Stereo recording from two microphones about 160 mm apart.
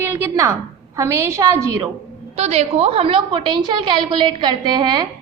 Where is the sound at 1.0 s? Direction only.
15° right (ahead or behind).